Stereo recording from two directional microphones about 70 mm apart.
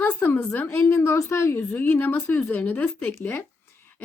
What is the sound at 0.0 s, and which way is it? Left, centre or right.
Speech, left.